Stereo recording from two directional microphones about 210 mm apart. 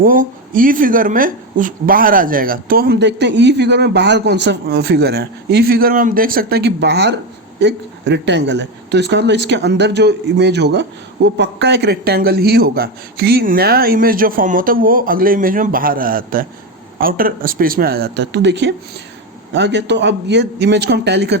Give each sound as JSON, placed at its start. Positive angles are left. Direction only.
{"t": 0.0, "sound": "a woman's voice", "side_deg": -40}